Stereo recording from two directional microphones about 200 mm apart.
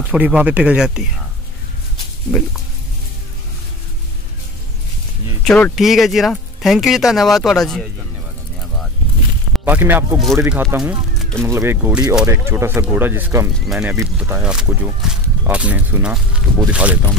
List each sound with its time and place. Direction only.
0.0 s speech: 5° right (ahead or behind)
5.4 s speech: 5° left (ahead or behind)
9.5 s speech: 10° right (ahead or behind)